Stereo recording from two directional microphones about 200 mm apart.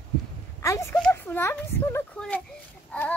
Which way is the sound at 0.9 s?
5° left (ahead or behind).